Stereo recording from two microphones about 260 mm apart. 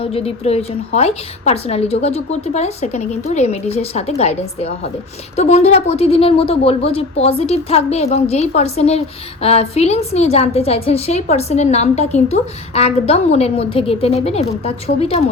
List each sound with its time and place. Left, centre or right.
0.0 s a woman's voice: left